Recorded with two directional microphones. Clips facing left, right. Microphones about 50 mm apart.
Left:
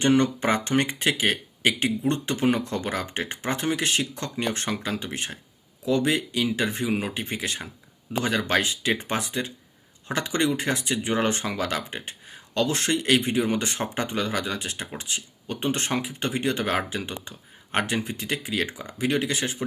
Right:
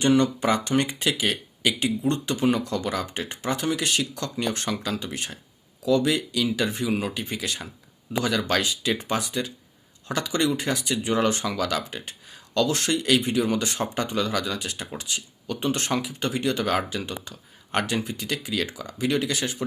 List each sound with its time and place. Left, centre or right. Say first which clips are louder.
0.0 s speech: even; left